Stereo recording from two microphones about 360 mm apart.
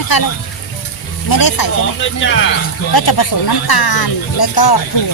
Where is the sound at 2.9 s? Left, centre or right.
Left.